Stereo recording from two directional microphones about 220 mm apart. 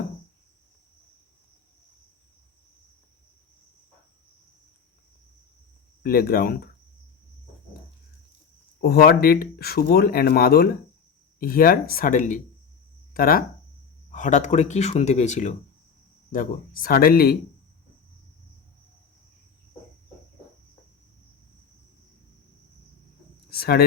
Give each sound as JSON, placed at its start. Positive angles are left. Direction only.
{"t": 6.0, "sound": "speech", "side_deg": 45}
{"t": 8.8, "sound": "speech", "side_deg": 45}
{"t": 23.5, "sound": "a sound", "side_deg": 45}